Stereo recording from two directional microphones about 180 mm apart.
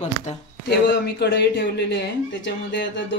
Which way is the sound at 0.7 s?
65° left (ahead or behind).